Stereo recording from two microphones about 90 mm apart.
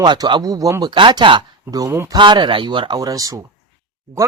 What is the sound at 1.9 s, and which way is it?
Speech, 30° right (ahead or behind).